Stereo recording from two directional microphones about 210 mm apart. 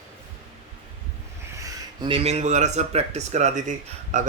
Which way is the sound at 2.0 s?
25° right (ahead or behind).